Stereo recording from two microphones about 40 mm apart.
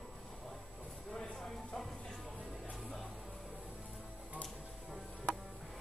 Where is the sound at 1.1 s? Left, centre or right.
Centre.